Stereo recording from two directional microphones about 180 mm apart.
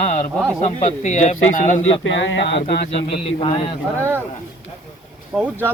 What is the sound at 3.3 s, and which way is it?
Speech, 30° left (ahead or behind).